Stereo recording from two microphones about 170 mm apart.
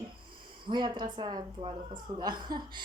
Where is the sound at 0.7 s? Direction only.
25° right (ahead or behind).